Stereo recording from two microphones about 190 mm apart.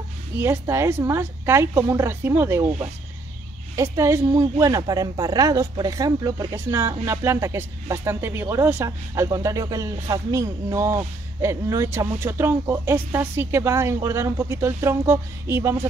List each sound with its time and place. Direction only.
0.4 s speech: 15° right (ahead or behind)